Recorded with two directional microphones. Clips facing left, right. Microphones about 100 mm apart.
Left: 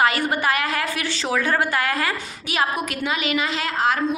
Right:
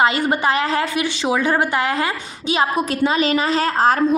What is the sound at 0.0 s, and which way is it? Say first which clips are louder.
A woman's voice: right 3 dB; 20° right (ahead or behind).